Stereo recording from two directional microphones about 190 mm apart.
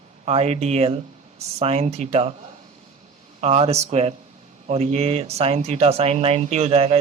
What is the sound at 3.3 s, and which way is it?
Speech, 35° right (ahead or behind).